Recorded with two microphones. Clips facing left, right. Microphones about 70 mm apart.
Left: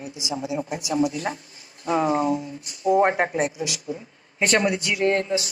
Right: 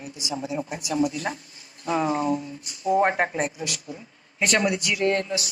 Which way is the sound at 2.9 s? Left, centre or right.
Centre.